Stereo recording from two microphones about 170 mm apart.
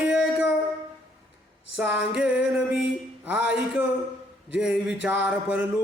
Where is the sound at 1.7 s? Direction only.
5° right (ahead or behind).